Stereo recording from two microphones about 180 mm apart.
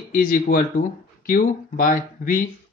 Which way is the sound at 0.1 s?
50° left (ahead or behind).